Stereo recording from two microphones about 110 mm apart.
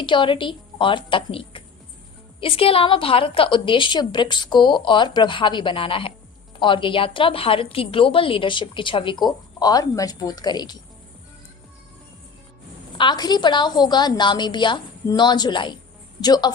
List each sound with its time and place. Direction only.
0.0 s a woman's voice: 50° left (ahead or behind)
13.0 s a woman's voice: 40° left (ahead or behind)